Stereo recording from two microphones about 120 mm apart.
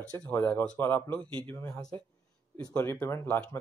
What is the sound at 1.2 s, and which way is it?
Speech, 35° right (ahead or behind).